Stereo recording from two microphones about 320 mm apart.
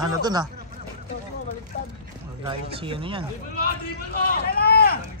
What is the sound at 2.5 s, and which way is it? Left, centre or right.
Speech, centre.